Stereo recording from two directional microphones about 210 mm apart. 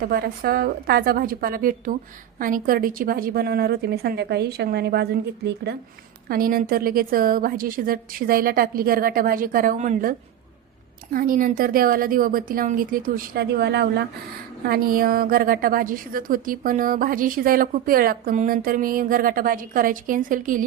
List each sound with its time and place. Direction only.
0.0 s a woman's voice: 45° right (ahead or behind)
6.2 s a woman's voice: 45° right (ahead or behind)